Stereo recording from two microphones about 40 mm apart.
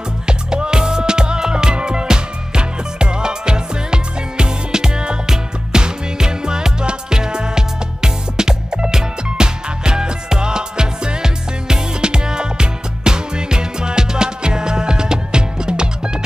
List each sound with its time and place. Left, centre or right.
0.3 s music: centre